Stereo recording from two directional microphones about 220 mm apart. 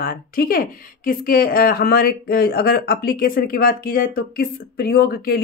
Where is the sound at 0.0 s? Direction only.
40° left (ahead or behind).